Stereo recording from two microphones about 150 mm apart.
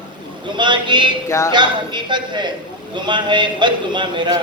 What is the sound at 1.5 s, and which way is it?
A man's voice, 30° right (ahead or behind).